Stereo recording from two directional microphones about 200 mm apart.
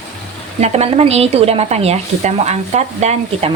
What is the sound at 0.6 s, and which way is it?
Speech, 30° right (ahead or behind).